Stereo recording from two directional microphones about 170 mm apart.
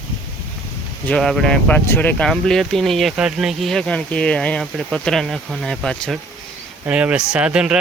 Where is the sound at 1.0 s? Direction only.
5° left (ahead or behind).